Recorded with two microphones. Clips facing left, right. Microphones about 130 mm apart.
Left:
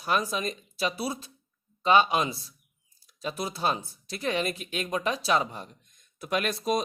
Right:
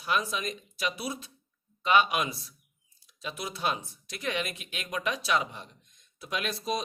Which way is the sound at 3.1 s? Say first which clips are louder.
Left 5 dB; 40° left (ahead or behind).